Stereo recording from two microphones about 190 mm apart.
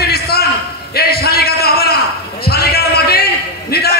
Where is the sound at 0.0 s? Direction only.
55° left (ahead or behind).